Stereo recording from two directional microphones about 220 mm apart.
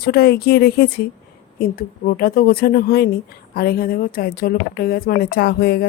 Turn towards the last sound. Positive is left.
turn(degrees=45)  # may be behind; listen again after turning